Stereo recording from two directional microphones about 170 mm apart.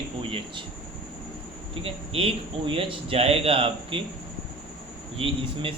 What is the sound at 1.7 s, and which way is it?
Speech, 35° right (ahead or behind).